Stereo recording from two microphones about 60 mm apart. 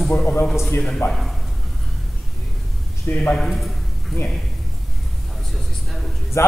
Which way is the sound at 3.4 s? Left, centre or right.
Centre.